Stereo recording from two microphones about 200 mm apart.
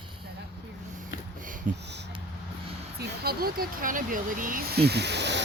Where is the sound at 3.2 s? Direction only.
45° right (ahead or behind).